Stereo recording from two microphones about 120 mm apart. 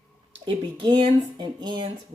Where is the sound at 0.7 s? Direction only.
50° right (ahead or behind).